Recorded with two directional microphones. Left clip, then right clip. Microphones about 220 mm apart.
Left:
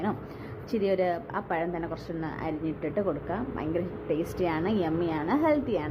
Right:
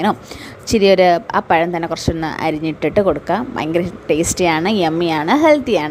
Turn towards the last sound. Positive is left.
turn(degrees=-40)  # may be behind; listen again after turning